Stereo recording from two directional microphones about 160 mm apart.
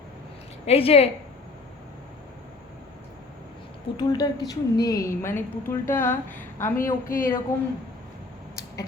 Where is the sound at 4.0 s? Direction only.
25° left (ahead or behind).